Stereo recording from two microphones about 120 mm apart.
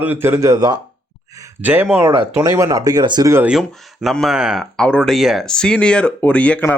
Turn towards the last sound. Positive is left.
turn(degrees=10)  # may be behind; listen again after turning